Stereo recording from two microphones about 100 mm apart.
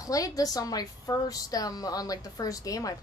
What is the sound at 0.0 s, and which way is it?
A woman's voice, 35° left (ahead or behind).